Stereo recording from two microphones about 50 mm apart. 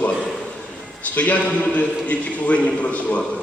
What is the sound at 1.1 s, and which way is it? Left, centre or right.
A man's voice, left.